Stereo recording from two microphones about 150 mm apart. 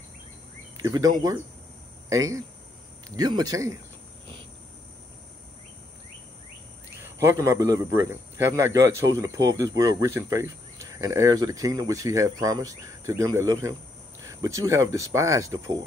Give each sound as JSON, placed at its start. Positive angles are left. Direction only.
{"t": 0.8, "sound": "a man's voice", "side_deg": -25}
{"t": 7.2, "sound": "a man's voice", "side_deg": -20}